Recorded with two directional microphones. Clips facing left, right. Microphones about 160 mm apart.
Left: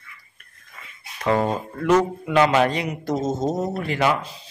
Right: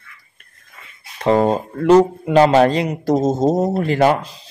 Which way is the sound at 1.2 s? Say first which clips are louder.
Right 6 dB; 30° right (ahead or behind).